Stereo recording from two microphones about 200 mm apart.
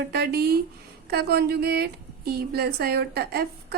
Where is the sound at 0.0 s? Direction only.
50° right (ahead or behind).